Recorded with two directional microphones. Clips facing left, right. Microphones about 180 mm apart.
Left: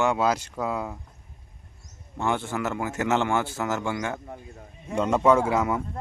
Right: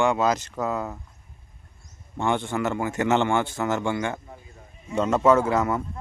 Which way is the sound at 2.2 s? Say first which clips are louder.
Right 2 dB; 5° left (ahead or behind).